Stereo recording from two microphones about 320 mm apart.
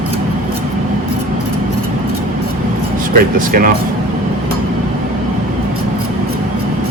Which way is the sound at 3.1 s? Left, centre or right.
Right.